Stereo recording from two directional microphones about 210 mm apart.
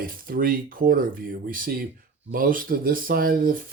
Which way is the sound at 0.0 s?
40° right (ahead or behind).